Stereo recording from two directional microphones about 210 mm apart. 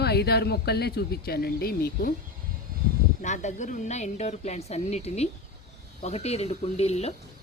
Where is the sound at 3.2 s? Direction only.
35° left (ahead or behind).